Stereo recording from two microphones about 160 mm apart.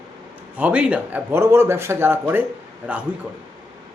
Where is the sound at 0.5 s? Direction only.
10° right (ahead or behind).